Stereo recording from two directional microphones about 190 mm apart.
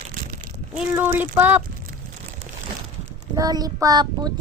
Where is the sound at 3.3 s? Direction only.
20° right (ahead or behind).